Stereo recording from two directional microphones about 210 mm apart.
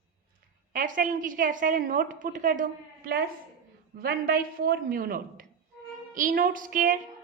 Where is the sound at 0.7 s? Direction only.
40° right (ahead or behind).